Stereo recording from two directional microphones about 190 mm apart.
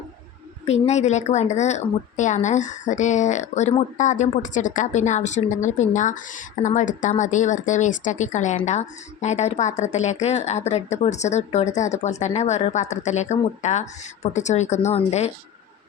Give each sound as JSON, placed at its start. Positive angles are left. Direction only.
{"t": 0.7, "sound": "speech", "side_deg": 35}